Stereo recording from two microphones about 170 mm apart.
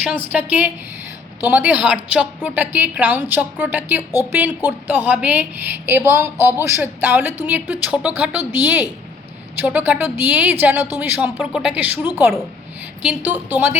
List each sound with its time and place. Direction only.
0.3 s a woman's voice: 10° right (ahead or behind)